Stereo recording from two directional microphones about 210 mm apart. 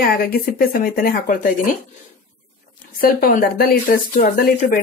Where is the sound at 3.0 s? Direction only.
45° left (ahead or behind).